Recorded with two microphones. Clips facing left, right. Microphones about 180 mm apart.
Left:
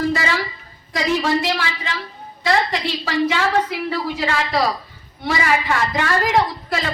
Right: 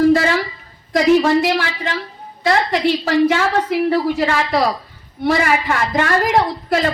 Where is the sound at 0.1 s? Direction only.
55° right (ahead or behind).